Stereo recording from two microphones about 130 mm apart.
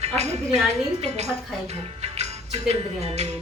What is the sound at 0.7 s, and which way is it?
Speech, 55° right (ahead or behind).